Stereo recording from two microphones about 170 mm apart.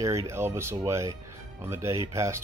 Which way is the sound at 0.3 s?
15° right (ahead or behind).